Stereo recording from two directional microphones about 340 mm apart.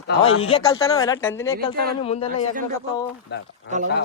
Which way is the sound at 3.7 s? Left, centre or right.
Right.